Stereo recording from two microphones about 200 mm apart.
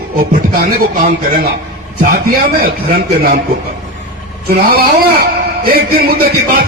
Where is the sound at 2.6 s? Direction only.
50° right (ahead or behind).